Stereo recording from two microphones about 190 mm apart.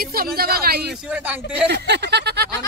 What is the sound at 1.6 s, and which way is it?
Speech, 60° right (ahead or behind).